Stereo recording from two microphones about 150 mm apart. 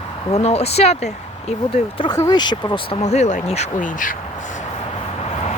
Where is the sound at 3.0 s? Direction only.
50° left (ahead or behind).